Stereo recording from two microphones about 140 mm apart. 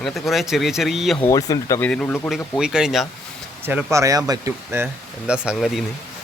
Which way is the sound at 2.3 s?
5° right (ahead or behind).